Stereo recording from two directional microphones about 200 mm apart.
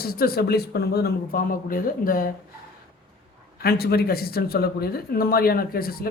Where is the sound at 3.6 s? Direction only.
50° left (ahead or behind).